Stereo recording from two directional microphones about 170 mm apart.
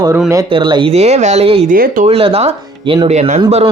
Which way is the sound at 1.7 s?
55° right (ahead or behind).